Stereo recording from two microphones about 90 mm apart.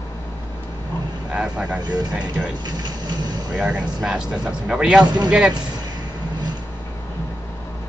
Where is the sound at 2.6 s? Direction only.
50° right (ahead or behind).